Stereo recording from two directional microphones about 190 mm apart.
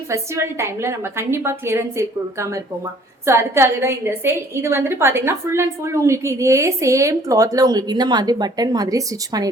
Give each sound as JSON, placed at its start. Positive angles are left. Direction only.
{"t": 0.1, "sound": "a woman's voice", "side_deg": -15}